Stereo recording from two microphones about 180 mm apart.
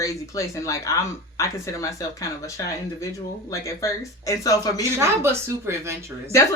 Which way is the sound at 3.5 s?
15° left (ahead or behind).